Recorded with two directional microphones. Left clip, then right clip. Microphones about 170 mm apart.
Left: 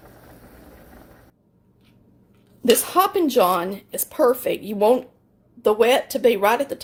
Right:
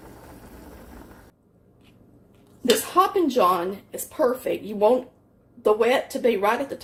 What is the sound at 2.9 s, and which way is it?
A woman's voice, 75° left (ahead or behind).